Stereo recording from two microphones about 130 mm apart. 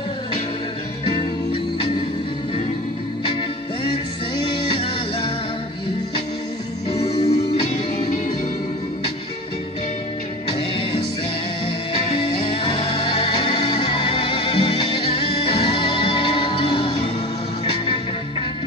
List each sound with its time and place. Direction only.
1.0 s music: 40° left (ahead or behind)
4.5 s music: 40° left (ahead or behind)
7.0 s music: 55° left (ahead or behind)
11.6 s music: 45° left (ahead or behind)